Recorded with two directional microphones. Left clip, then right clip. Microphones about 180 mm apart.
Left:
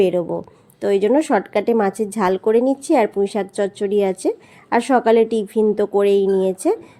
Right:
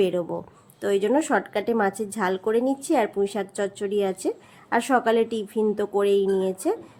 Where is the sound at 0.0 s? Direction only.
20° left (ahead or behind).